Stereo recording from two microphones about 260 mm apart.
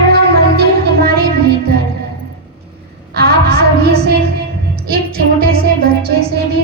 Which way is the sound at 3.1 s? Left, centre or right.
Right.